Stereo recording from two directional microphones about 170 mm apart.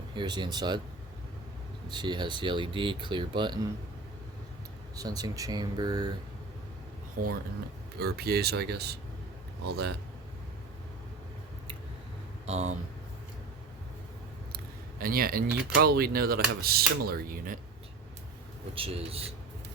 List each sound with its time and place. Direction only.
0.1 s speech: 25° right (ahead or behind)
1.9 s speech: 25° right (ahead or behind)
4.9 s speech: 20° right (ahead or behind)
7.2 s speech: 55° right (ahead or behind)
7.9 s speech: 70° right (ahead or behind)
12.5 s speech: 40° right (ahead or behind)
14.5 s speech: 60° right (ahead or behind)
18.7 s speech: 35° right (ahead or behind)